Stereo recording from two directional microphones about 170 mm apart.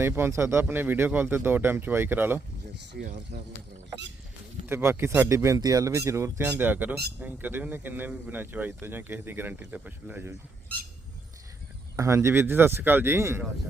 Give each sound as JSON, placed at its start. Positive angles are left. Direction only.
{"t": 0.0, "sound": "speech", "side_deg": -15}
{"t": 3.0, "sound": "speech", "side_deg": -70}
{"t": 4.6, "sound": "speech", "side_deg": -15}
{"t": 11.9, "sound": "speech", "side_deg": -15}